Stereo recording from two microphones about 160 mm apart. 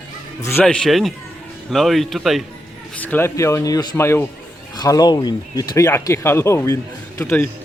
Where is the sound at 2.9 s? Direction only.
10° left (ahead or behind).